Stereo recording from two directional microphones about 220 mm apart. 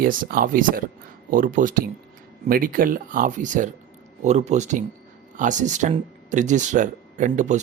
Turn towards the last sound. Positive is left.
turn(degrees=-35)  # may be behind; listen again after turning